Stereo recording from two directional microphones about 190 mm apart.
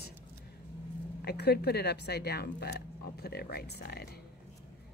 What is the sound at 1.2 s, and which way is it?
Speech, 55° left (ahead or behind).